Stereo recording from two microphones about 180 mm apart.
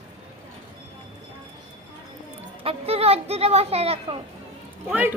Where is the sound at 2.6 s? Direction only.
35° right (ahead or behind).